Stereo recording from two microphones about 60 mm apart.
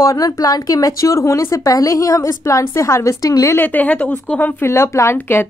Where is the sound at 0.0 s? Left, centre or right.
Left.